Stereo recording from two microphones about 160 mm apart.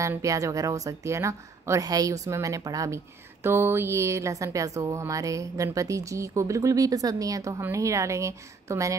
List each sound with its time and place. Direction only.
0.0 s speech: 20° right (ahead or behind)